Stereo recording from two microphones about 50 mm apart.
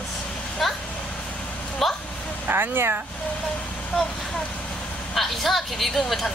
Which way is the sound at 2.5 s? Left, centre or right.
Right.